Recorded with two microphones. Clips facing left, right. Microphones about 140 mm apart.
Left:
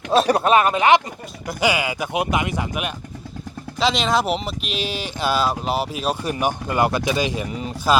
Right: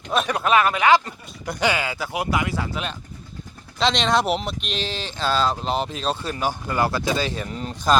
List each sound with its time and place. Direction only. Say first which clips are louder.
0.1 s speech: left 4 dB; 35° left (ahead or behind)
1.5 s speech: left 2 dB; 10° left (ahead or behind)
3.8 s speech: left 1 dB; 5° left (ahead or behind)